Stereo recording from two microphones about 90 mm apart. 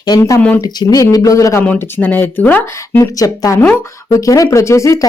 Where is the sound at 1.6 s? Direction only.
20° left (ahead or behind).